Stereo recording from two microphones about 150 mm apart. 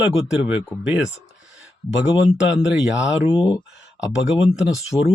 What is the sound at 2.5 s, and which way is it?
Speech, 5° right (ahead or behind).